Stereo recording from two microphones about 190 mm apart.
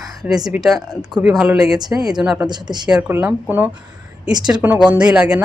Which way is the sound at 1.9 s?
5° right (ahead or behind).